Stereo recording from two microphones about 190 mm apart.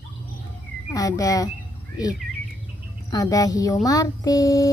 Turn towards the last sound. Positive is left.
turn(degrees=15)  # may be behind; listen again after turning